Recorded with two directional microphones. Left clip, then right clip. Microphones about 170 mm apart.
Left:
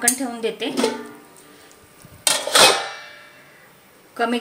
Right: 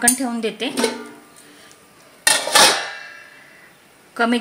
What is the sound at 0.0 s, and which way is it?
Speech, 55° right (ahead or behind).